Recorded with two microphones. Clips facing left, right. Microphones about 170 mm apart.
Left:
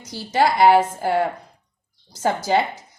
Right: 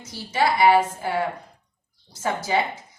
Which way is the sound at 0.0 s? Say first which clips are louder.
Left 4 dB; 40° left (ahead or behind).